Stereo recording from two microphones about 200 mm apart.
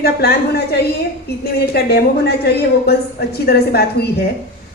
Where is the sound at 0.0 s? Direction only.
55° left (ahead or behind).